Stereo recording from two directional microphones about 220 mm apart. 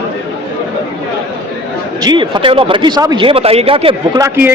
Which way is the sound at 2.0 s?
20° right (ahead or behind).